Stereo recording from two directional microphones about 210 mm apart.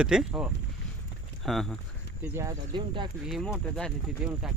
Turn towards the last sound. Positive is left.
turn(degrees=5)  # may be behind; listen again after turning